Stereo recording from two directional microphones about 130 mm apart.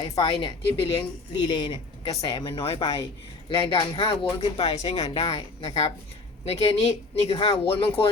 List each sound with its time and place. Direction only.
0.0 s speech: 40° left (ahead or behind)